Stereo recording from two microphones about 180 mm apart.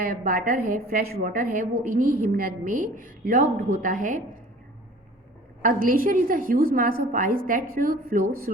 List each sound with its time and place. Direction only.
0.0 s a woman's voice: 50° right (ahead or behind)
5.6 s a woman's voice: 50° right (ahead or behind)